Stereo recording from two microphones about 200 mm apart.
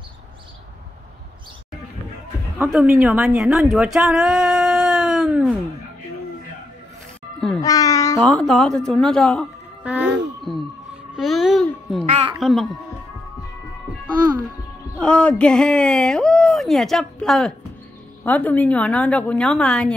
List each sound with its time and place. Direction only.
3.0 s speech: 5° right (ahead or behind)
7.3 s music: 5° left (ahead or behind)
7.6 s a child's voice: 15° left (ahead or behind)
8.2 s speech: centre (ahead or behind)
12.1 s a woman's voice: 25° right (ahead or behind)
12.4 s speech: centre (ahead or behind)
15.0 s a woman's voice: 5° left (ahead or behind)